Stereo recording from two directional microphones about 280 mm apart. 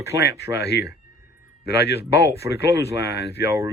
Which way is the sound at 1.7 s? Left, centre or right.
Left.